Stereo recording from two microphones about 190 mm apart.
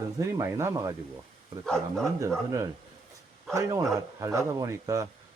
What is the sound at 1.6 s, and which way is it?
Speech, 5° left (ahead or behind).